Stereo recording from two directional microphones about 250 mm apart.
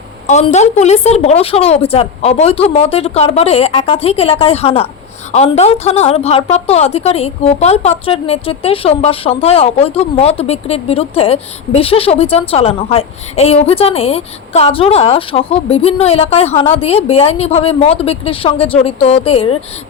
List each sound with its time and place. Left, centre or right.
0.3 s a woman's voice: left